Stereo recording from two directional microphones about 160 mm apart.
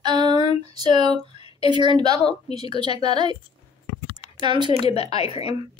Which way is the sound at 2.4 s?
40° left (ahead or behind).